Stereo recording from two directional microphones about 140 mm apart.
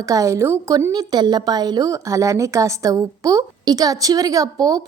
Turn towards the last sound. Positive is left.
turn(degrees=-25)  # may be behind; listen again after turning